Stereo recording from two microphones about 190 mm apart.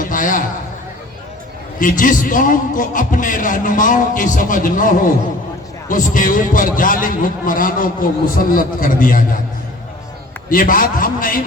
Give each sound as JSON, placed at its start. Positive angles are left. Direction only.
{"t": 0.0, "sound": "a sound", "side_deg": 45}
{"t": 1.8, "sound": "a man's voice", "side_deg": 45}
{"t": 10.5, "sound": "a man's voice", "side_deg": 45}